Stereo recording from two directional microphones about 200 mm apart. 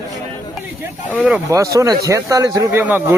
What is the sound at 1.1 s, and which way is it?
Speech, 5° right (ahead or behind).